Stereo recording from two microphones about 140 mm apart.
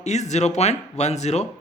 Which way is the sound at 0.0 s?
55° left (ahead or behind).